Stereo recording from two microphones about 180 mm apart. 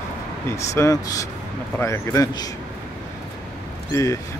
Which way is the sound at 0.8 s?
20° left (ahead or behind).